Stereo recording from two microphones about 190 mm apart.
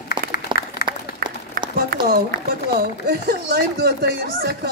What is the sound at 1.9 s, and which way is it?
Run, 50° right (ahead or behind).